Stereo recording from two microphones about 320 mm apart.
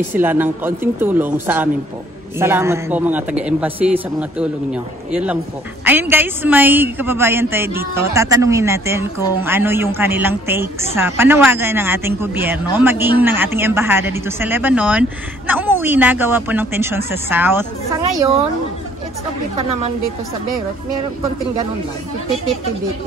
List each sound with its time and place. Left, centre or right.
0.1 s a woman's voice: centre